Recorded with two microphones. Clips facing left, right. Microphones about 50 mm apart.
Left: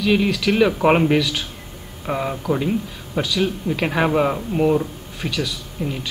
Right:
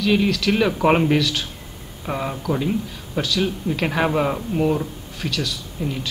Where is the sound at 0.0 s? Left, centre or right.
Centre.